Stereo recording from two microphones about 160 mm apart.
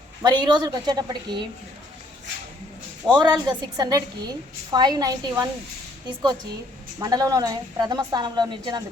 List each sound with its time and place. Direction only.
0.2 s a woman's voice: 25° right (ahead or behind)
3.1 s a woman's voice: 25° right (ahead or behind)
7.0 s a woman's voice: 25° right (ahead or behind)